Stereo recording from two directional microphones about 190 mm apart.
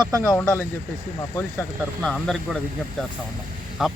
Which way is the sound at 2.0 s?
5° left (ahead or behind).